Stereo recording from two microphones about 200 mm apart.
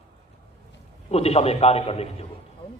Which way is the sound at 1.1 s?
30° left (ahead or behind).